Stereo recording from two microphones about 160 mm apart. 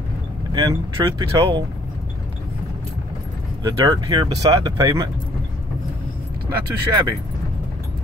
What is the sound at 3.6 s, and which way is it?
Speech, 25° right (ahead or behind).